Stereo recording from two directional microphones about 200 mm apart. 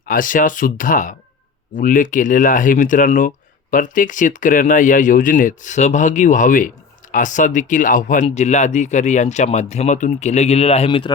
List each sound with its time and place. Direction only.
0.1 s speech: 40° left (ahead or behind); by 11.1 s 25° left (ahead or behind)